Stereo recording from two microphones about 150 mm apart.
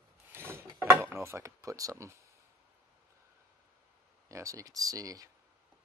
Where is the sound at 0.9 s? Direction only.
15° right (ahead or behind).